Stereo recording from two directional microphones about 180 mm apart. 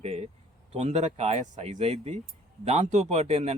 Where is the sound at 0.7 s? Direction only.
35° right (ahead or behind).